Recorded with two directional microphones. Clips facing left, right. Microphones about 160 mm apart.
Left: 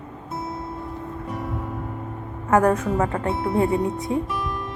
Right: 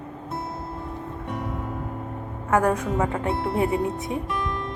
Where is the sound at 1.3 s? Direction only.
Centre (ahead or behind).